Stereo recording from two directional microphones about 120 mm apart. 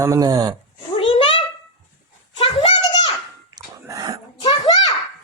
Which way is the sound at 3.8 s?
30° right (ahead or behind).